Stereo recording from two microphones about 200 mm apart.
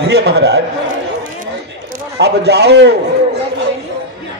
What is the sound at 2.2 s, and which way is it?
Speech, 55° right (ahead or behind).